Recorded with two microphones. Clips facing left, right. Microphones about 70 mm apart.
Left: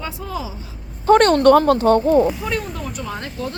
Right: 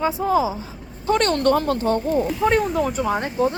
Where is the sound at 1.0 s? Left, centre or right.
Left.